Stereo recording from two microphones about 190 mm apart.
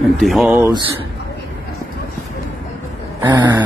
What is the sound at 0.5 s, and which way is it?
Speech, 15° right (ahead or behind).